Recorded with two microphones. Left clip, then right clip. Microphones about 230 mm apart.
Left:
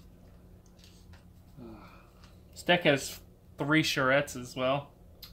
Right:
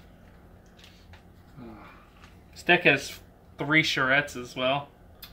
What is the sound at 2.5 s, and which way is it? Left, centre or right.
Speech, left.